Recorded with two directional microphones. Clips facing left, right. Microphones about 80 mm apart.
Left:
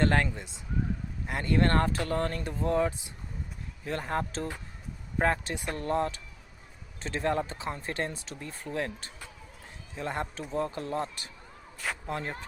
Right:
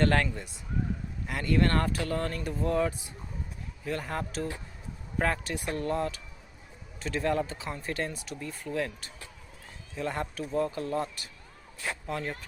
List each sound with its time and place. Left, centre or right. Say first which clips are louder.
0.0 s speech: even; left